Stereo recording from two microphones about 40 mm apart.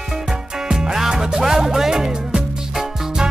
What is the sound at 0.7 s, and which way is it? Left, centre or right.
Music, centre.